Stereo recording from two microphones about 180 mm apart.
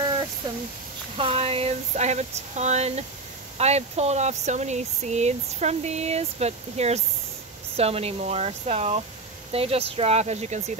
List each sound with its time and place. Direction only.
1.1 s speech: 30° right (ahead or behind)